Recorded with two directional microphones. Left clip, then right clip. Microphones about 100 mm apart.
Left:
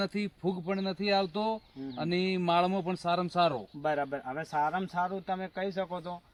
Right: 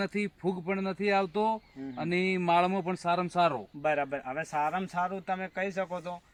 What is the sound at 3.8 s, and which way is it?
Speech, 30° right (ahead or behind).